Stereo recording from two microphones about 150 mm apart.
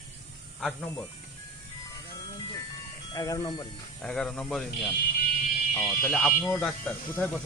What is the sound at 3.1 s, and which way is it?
Speech, 25° left (ahead or behind).